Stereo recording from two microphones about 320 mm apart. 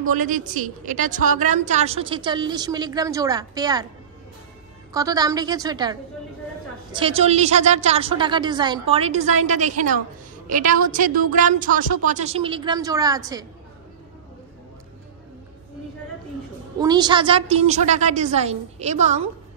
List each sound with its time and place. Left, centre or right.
0.1 s a woman's voice: right
4.9 s a woman's voice: centre
16.8 s a woman's voice: centre